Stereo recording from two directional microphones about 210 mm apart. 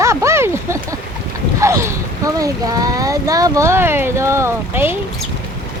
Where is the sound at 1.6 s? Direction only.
15° right (ahead or behind).